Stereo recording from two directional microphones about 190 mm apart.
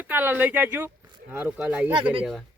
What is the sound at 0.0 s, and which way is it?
Speech, 10° right (ahead or behind).